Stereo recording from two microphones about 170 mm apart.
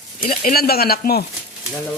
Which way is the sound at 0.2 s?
55° left (ahead or behind).